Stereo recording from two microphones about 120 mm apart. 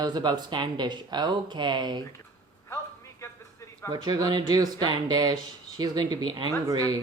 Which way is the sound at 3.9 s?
35° right (ahead or behind).